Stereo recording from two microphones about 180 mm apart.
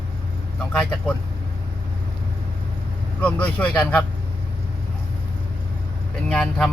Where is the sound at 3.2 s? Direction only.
5° left (ahead or behind).